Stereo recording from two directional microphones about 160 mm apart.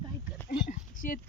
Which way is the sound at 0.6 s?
55° left (ahead or behind).